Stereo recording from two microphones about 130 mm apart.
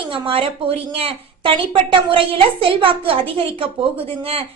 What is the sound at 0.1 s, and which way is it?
A woman's voice, 45° right (ahead or behind).